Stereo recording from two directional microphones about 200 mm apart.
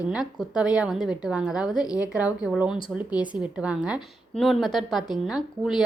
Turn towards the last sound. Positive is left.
turn(degrees=0)  # may be behind; listen again after turning